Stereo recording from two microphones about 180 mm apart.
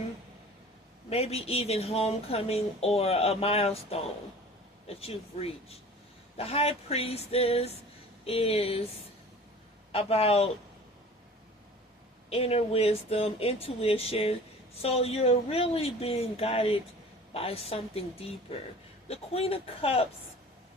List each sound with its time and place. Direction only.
1.1 s speech: 35° left (ahead or behind)
9.9 s speech: 35° left (ahead or behind)
12.3 s speech: 35° left (ahead or behind)